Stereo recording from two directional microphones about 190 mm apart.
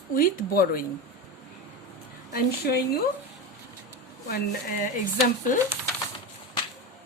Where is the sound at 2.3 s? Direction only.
55° left (ahead or behind).